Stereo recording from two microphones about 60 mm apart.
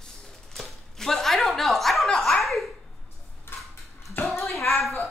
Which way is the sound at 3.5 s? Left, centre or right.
Left.